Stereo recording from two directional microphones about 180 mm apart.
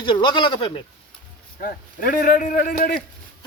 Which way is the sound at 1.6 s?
50° left (ahead or behind).